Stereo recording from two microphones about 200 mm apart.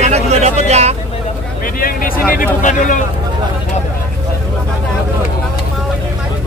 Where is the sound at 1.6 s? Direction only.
45° left (ahead or behind).